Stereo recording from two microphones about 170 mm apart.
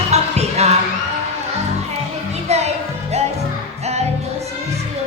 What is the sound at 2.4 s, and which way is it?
Music, 40° right (ahead or behind).